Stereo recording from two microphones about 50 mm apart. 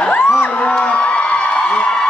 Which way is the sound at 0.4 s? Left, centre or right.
Left.